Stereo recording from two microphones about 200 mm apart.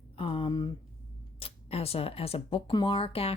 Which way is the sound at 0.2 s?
25° left (ahead or behind).